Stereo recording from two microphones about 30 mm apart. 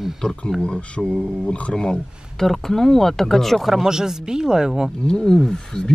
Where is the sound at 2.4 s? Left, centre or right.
Centre.